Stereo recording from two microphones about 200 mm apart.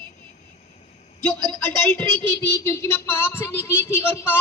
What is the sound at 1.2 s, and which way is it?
Speech, 10° left (ahead or behind).